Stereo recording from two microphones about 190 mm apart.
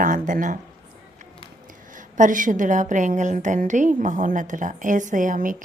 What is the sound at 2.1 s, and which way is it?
A woman's voice, 45° right (ahead or behind).